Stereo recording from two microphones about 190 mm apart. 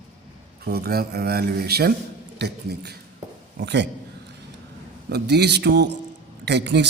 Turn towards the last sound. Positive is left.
turn(degrees=-65)  # may be behind; listen again after turning